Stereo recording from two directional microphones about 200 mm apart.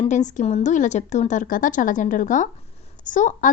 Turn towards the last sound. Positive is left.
turn(degrees=40)  # may be behind; listen again after turning